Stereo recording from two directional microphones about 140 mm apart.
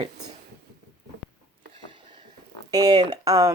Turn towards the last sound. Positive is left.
turn(degrees=-25)  # may be behind; listen again after turning